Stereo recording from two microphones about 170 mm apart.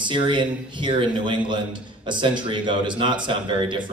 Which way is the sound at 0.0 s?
30° right (ahead or behind).